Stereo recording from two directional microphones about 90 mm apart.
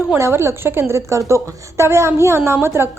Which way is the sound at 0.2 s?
30° right (ahead or behind).